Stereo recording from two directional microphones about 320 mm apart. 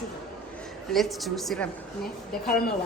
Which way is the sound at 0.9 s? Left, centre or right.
Centre.